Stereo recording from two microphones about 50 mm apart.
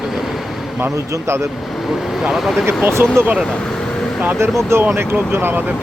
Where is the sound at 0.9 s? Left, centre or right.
Right.